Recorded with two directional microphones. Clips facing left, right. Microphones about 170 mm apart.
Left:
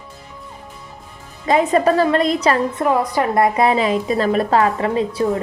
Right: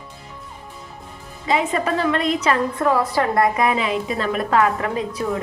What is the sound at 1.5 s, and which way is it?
A woman's voice, 40° left (ahead or behind).